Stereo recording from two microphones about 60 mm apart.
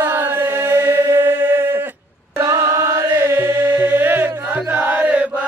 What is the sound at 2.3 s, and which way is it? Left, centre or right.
Chant, right.